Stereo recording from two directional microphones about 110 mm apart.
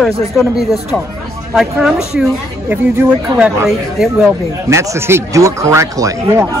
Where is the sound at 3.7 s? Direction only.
5° right (ahead or behind).